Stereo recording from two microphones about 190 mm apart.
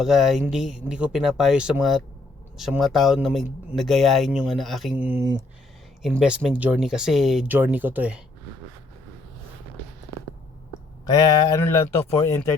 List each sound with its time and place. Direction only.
0.0 s speech: centre (ahead or behind)
11.0 s speech: 20° left (ahead or behind)